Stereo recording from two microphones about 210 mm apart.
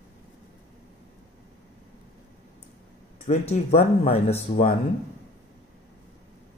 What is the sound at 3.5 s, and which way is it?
Speech, 30° left (ahead or behind).